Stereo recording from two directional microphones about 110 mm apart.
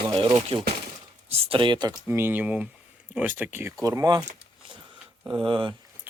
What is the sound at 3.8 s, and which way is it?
Speech, 30° right (ahead or behind).